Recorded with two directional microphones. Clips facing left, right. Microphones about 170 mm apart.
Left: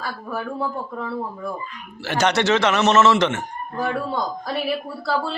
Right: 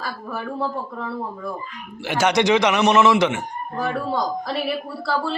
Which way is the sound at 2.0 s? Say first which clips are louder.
Right 1 dB; 10° right (ahead or behind).